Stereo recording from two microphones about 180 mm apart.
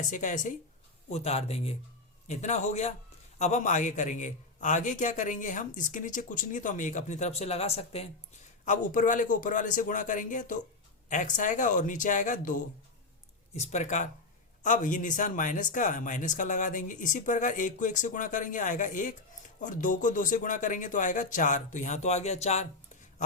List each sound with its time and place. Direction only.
0.0 s a man's voice: 45° left (ahead or behind)